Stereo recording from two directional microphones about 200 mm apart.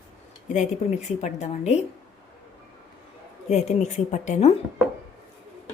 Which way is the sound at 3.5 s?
35° left (ahead or behind).